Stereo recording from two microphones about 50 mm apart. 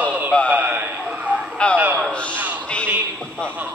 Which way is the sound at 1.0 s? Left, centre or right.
Right.